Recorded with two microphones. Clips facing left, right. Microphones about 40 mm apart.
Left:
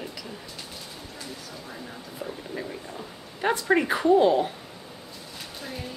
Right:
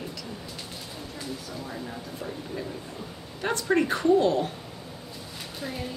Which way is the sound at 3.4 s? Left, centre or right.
Centre.